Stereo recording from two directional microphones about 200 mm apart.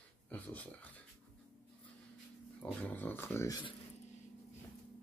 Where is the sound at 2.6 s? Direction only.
5° left (ahead or behind).